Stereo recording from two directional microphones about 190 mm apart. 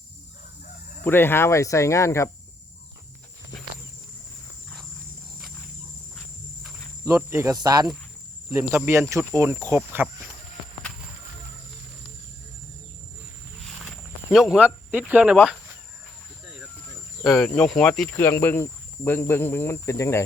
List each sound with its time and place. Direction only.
1.0 s cricket: 10° left (ahead or behind)
7.0 s speech: 15° right (ahead or behind)
13.7 s speech: centre (ahead or behind)
17.2 s cricket: centre (ahead or behind)